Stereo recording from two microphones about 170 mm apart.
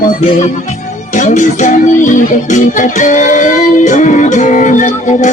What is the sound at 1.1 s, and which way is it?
Music, 45° left (ahead or behind).